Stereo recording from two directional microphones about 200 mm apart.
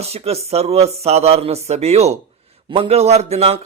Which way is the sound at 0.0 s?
30° right (ahead or behind).